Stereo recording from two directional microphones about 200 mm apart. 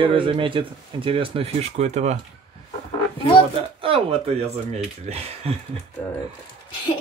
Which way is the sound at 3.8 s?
30° right (ahead or behind).